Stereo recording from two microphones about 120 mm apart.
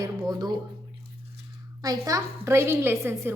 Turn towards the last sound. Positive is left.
turn(degrees=-20)  # may be behind; listen again after turning